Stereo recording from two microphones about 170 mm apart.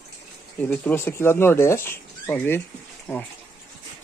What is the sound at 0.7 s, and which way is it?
Speech, 10° left (ahead or behind).